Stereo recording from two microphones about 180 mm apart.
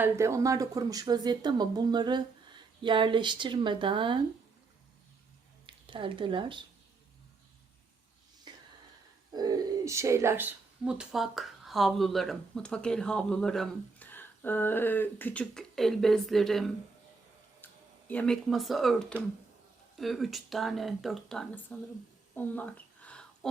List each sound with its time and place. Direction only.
0.0 s speech: 15° right (ahead or behind)
5.6 s speech: 30° right (ahead or behind)
9.3 s speech: 20° right (ahead or behind); by 16.7 s centre (ahead or behind)
17.6 s a sound: 10° left (ahead or behind)
18.1 s speech: 5° left (ahead or behind)
22.4 s a sound: 10° left (ahead or behind)